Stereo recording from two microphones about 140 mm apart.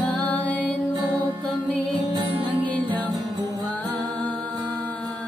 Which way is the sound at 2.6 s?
10° left (ahead or behind).